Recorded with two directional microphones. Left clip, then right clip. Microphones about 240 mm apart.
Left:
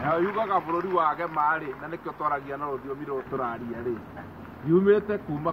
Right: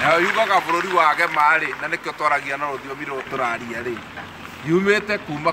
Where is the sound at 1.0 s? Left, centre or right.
Right.